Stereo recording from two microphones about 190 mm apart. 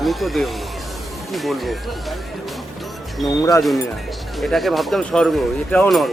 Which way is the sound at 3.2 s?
20° left (ahead or behind).